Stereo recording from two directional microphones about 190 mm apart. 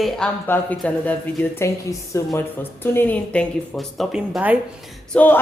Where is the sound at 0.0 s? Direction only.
5° left (ahead or behind).